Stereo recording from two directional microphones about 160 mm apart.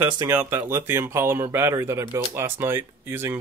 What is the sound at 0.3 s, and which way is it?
Speech, 15° right (ahead or behind).